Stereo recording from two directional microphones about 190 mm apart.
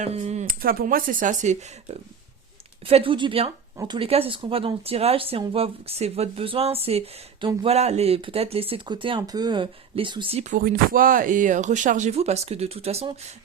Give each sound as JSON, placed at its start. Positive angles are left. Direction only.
{"t": 0.0, "sound": "speech", "side_deg": -35}
{"t": 0.6, "sound": "speech", "side_deg": -50}